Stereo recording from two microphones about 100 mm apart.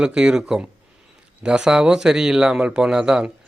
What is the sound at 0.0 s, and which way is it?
A man's voice, 10° right (ahead or behind).